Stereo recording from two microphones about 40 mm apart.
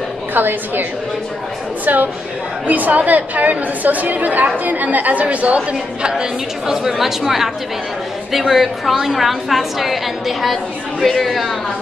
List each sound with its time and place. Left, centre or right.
0.3 s a woman's voice: right
1.9 s a woman's voice: right
6.7 s a woman's voice: centre